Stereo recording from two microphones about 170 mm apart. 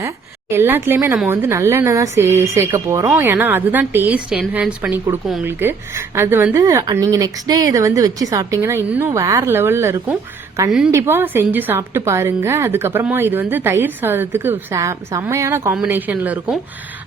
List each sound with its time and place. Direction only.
0.0 s a woman's voice: 15° right (ahead or behind)